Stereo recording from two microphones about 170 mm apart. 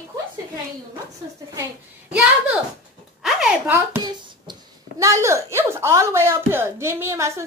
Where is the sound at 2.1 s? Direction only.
5° right (ahead or behind).